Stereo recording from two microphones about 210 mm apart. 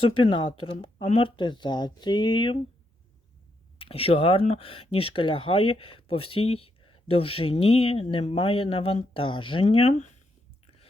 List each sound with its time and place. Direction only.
0.2 s speech: 25° left (ahead or behind)
3.8 s speech: 25° left (ahead or behind)